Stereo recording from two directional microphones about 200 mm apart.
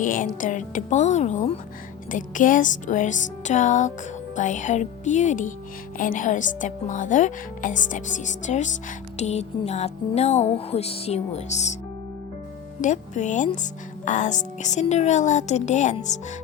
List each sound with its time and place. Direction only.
0.0 s a woman's voice: 40° left (ahead or behind)
12.8 s a woman's voice: 35° left (ahead or behind)